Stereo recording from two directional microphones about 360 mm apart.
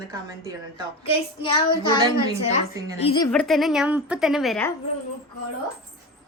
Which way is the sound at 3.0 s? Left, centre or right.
Centre.